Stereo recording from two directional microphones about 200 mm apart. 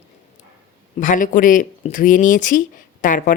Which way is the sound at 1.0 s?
40° left (ahead or behind).